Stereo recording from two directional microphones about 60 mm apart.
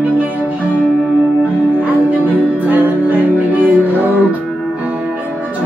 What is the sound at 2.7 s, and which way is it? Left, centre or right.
Music, right.